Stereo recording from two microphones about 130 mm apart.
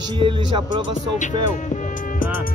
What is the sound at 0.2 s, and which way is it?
Speech, 40° right (ahead or behind).